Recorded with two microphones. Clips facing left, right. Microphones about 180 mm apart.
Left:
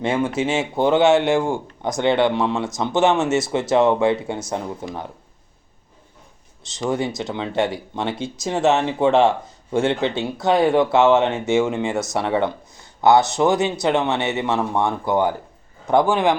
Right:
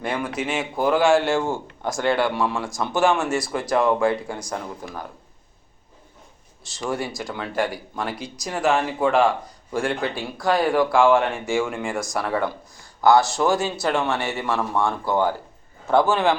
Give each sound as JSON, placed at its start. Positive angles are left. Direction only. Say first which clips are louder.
{"t": 0.0, "sound": "speech", "louder": "left 6 dB", "side_deg": 25}
{"t": 6.7, "sound": "a man's voice", "louder": "left 4 dB", "side_deg": 20}